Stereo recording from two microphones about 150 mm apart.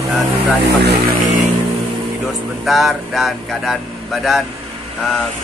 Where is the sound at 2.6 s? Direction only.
Centre (ahead or behind).